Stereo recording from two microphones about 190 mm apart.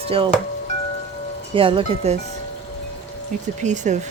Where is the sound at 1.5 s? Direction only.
30° right (ahead or behind).